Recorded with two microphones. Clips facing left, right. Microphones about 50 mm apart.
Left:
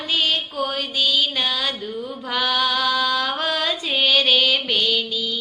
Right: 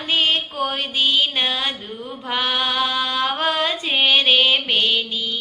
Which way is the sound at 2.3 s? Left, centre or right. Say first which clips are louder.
Even; right.